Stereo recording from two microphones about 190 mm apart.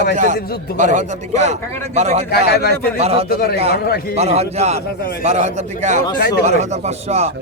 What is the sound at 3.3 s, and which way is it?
Speech, 55° left (ahead or behind).